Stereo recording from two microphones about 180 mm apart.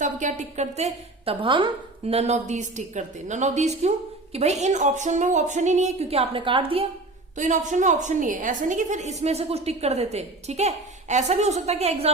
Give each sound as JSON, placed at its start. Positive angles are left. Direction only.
{"t": 0.0, "sound": "a woman's voice", "side_deg": -45}
{"t": 7.3, "sound": "a woman's voice", "side_deg": -45}